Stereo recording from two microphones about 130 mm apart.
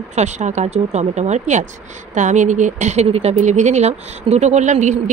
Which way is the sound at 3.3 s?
65° right (ahead or behind).